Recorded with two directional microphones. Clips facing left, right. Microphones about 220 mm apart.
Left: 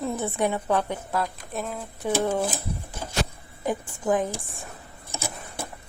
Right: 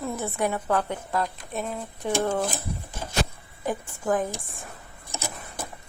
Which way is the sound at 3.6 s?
15° left (ahead or behind).